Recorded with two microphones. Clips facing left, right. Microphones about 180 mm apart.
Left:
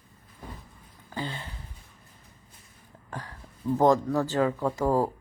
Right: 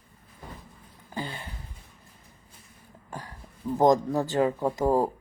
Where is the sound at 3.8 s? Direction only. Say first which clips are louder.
Right 1 dB; 15° right (ahead or behind).